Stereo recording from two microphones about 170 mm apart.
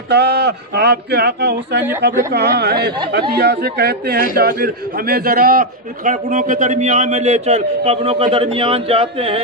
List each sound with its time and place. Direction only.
0.1 s a man's voice: 75° right (ahead or behind); by 9.4 s 35° right (ahead or behind)